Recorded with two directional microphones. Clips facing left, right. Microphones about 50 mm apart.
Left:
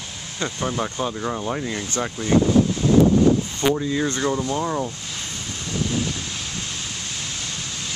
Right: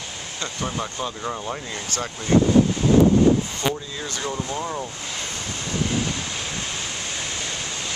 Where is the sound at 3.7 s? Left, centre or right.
Left.